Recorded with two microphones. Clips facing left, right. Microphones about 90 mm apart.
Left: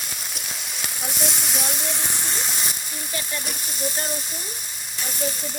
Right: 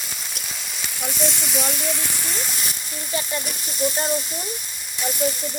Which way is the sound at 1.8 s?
20° left (ahead or behind).